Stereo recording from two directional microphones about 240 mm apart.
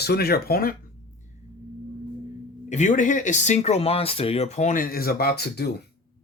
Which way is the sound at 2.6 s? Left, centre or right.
Left.